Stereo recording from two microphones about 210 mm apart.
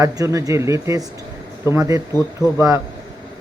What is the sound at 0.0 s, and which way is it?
Speech, 15° right (ahead or behind).